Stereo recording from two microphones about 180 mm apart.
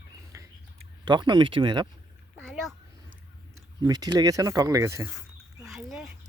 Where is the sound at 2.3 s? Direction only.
Centre (ahead or behind).